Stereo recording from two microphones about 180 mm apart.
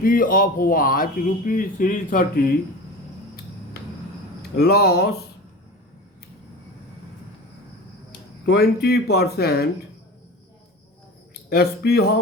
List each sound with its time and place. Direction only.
0.0 s speech: 50° left (ahead or behind)
4.5 s speech: 60° left (ahead or behind)
8.4 s speech: 60° left (ahead or behind)
11.4 s speech: 60° left (ahead or behind)